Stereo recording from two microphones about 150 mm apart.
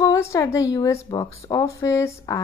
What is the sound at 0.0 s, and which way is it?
A woman's voice, 20° left (ahead or behind).